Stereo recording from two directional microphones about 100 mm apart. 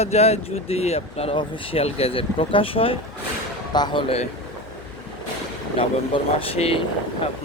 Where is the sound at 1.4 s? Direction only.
65° left (ahead or behind).